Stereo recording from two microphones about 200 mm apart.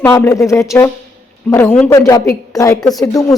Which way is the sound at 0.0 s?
10° left (ahead or behind).